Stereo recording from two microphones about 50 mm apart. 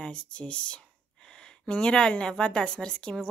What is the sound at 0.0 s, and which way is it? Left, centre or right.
A woman's voice, left.